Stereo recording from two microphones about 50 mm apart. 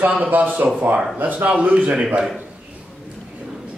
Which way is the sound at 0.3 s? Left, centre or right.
Right.